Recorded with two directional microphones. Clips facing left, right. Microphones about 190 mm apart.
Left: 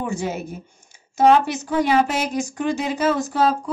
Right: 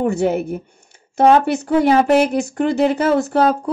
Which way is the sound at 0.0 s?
60° right (ahead or behind).